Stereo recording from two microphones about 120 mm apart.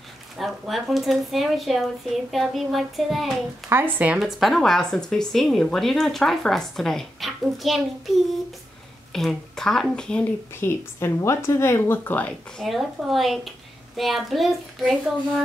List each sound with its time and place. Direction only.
0.4 s speech: centre (ahead or behind)
3.6 s speech: 15° right (ahead or behind)
4.2 s speech: centre (ahead or behind)
9.1 s speech: 5° left (ahead or behind)
10.5 s speech: 20° left (ahead or behind)
12.5 s speech: centre (ahead or behind)